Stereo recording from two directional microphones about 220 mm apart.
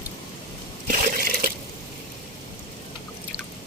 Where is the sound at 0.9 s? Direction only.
40° right (ahead or behind).